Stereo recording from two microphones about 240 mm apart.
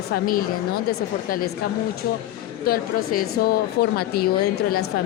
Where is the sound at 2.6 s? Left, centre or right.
Left.